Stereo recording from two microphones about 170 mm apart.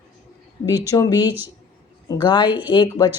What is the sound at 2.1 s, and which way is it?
A woman's voice, 25° left (ahead or behind).